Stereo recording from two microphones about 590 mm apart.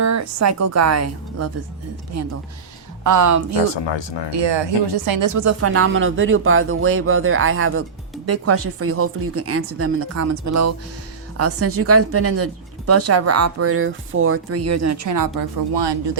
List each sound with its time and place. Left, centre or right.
0.0 s speech: right
3.8 s speech: left
4.3 s speech: right
15.4 s speech: right